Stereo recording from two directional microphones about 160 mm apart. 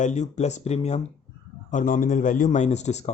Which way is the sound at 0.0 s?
45° left (ahead or behind).